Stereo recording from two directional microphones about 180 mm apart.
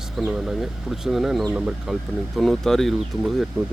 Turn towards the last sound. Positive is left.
turn(degrees=0)  # may be behind; listen again after turning